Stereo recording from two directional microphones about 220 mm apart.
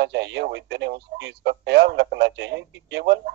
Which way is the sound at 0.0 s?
50° right (ahead or behind).